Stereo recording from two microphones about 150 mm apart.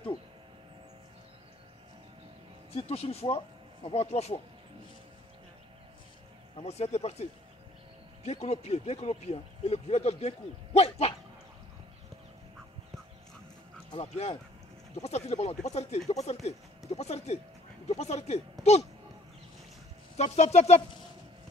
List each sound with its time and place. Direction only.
2.7 s speech: 40° left (ahead or behind)
6.5 s speech: 45° left (ahead or behind)
13.9 s speech: 45° left (ahead or behind)
20.2 s speech: 45° left (ahead or behind)